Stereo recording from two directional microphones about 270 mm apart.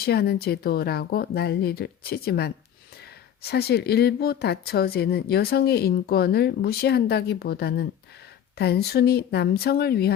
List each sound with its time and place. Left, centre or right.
0.0 s speech: left